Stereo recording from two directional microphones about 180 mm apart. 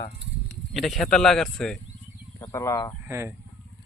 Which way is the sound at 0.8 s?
Centre (ahead or behind).